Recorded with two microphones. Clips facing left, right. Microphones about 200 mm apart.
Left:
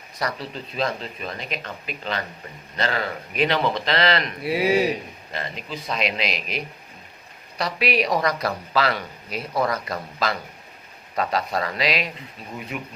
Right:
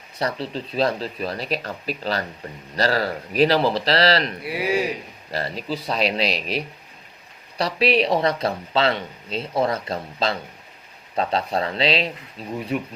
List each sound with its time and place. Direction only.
0.2 s speech: 30° right (ahead or behind)
4.4 s speech: 25° left (ahead or behind)
5.3 s speech: 35° right (ahead or behind)
7.6 s speech: 30° right (ahead or behind)